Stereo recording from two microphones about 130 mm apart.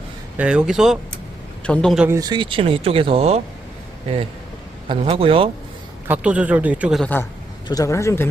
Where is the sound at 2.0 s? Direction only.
25° right (ahead or behind); by 3.4 s 50° right (ahead or behind).